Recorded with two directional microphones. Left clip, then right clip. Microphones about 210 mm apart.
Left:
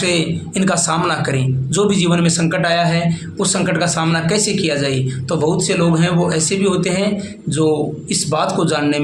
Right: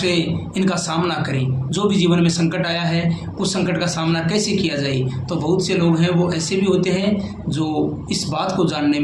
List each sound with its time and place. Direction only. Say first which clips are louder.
0.0 s speech: left 2 dB; 50° left (ahead or behind)
8.1 s speech: left 6 dB; 50° left (ahead or behind)